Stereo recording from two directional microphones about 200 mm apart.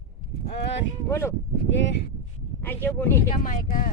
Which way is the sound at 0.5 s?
60° left (ahead or behind).